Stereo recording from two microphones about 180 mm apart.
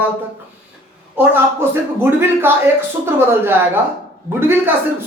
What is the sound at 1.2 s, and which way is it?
Speech, 15° right (ahead or behind).